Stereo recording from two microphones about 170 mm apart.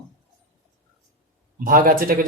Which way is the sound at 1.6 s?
55° right (ahead or behind).